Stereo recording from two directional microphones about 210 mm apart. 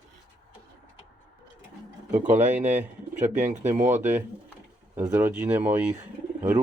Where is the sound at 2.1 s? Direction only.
40° right (ahead or behind).